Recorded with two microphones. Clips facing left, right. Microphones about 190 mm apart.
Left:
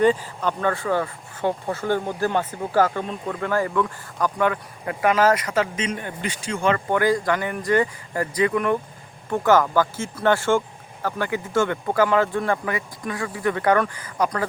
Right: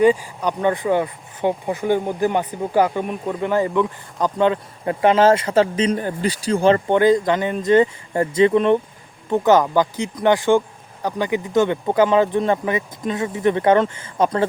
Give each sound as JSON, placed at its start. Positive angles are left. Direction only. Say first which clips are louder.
{"t": 0.0, "sound": "speech", "louder": "right 3 dB", "side_deg": -10}